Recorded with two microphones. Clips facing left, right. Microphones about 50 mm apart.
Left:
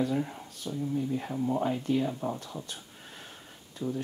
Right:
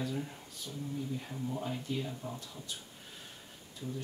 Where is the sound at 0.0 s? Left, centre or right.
Left.